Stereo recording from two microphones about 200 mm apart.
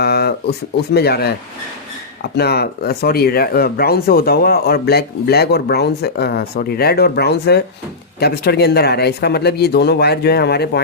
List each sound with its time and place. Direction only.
0.0 s a sound: 50° left (ahead or behind)
0.9 s speech: 50° left (ahead or behind)
2.3 s speech: 55° left (ahead or behind)